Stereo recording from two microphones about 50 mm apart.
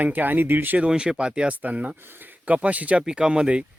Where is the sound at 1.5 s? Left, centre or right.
Right.